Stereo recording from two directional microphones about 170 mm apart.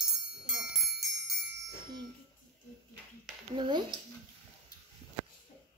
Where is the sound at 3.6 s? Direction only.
25° right (ahead or behind).